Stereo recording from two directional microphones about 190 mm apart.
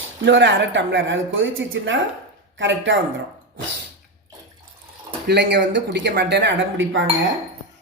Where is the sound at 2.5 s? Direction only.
75° right (ahead or behind).